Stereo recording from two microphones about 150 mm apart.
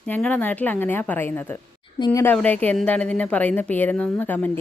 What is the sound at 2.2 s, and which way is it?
Speech, 10° left (ahead or behind).